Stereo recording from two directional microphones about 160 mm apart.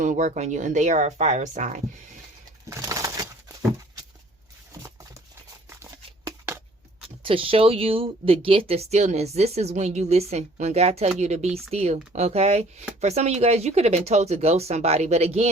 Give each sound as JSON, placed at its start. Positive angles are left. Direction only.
{"t": 0.0, "sound": "speech", "side_deg": -50}
{"t": 2.6, "sound": "pigeon", "side_deg": -20}
{"t": 5.6, "sound": "a sound", "side_deg": -15}
{"t": 7.2, "sound": "speech", "side_deg": -35}